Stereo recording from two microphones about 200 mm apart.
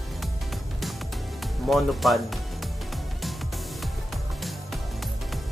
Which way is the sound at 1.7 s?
Centre (ahead or behind).